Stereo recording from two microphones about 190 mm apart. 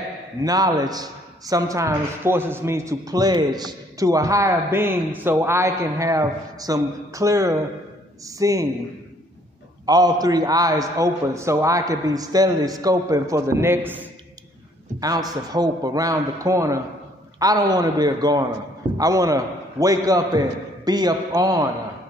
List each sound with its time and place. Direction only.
0.4 s a man's voice: 20° right (ahead or behind)
9.8 s a man's voice: 20° right (ahead or behind)